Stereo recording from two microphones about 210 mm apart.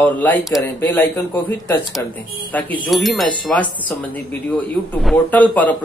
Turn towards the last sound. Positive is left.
turn(degrees=5)  # may be behind; listen again after turning